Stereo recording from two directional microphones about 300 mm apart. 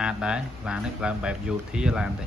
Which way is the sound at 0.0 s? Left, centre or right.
Centre.